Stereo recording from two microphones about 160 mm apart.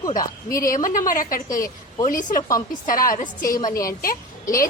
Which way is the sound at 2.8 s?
60° left (ahead or behind).